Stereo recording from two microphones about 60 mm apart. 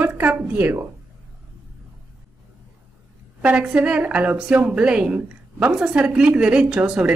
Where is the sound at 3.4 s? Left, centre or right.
Centre.